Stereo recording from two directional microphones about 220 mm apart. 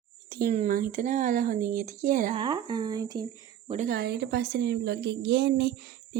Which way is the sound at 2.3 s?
20° right (ahead or behind).